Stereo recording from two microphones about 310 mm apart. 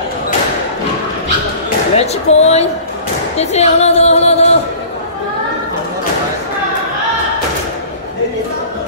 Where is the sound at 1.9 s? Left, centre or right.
Centre.